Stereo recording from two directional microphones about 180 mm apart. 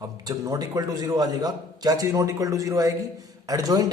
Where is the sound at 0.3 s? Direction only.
20° right (ahead or behind).